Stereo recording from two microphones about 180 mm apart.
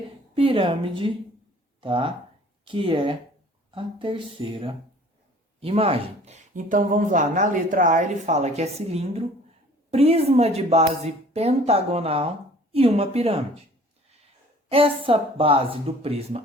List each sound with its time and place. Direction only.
0.3 s a woman's voice: 30° right (ahead or behind)
14.7 s speech: 30° right (ahead or behind)